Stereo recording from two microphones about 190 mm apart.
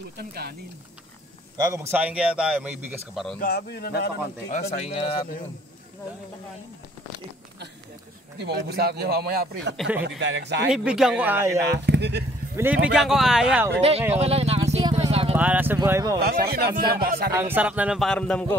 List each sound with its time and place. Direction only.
0.2 s speech: 55° right (ahead or behind)
1.7 s a man's voice: 10° right (ahead or behind)
3.3 s a man's voice: 55° left (ahead or behind)
4.5 s speech: 35° left (ahead or behind)
8.4 s speech: 60° right (ahead or behind)
9.8 s a man's voice: 5° right (ahead or behind)
10.0 s speech: 70° right (ahead or behind)
10.7 s speech: 5° right (ahead or behind)
11.6 s speech: 65° right (ahead or behind)
12.5 s speech: 10° right (ahead or behind)
13.7 s speech: 35° right (ahead or behind)
15.3 s a man's voice: 10° right (ahead or behind)
16.5 s speech: 55° right (ahead or behind)
17.3 s speech: 15° right (ahead or behind); by 18.6 s 5° left (ahead or behind)